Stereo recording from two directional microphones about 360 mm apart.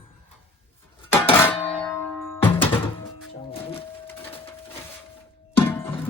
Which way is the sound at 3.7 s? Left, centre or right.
Centre.